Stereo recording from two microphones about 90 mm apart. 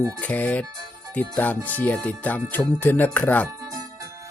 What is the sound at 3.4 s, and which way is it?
Music, 35° right (ahead or behind).